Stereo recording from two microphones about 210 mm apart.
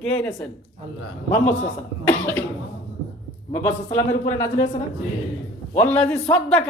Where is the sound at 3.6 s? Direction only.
10° left (ahead or behind).